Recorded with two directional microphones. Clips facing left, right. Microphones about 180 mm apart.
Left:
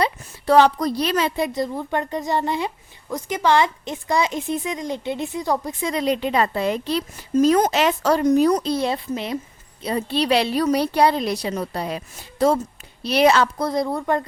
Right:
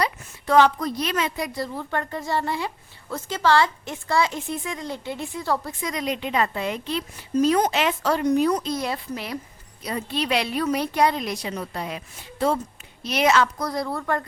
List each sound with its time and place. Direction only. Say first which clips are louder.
0.0 s a woman's voice: left 4 dB; 35° left (ahead or behind); by 5.9 s 20° left (ahead or behind)
5.9 s a woman's voice: left 5 dB; 30° left (ahead or behind)